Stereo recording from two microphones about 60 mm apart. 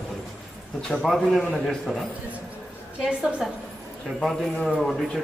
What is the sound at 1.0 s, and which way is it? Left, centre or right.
A man's voice, centre.